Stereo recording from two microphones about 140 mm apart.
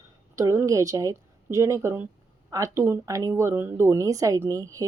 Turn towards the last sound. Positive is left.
turn(degrees=-20)  # may be behind; listen again after turning